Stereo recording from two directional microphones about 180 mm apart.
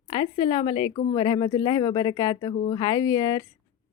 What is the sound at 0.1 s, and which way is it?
A woman's voice, 25° left (ahead or behind).